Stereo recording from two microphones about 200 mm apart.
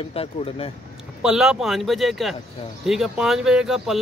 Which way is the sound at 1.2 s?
Centre (ahead or behind).